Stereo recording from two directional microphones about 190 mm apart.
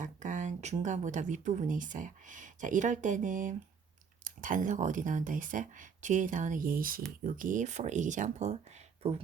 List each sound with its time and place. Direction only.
0.0 s speech: 40° right (ahead or behind)